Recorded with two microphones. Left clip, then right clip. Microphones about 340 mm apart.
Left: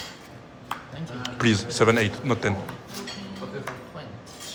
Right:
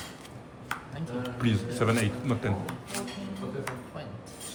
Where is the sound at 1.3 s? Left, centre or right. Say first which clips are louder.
Left 9 dB; left.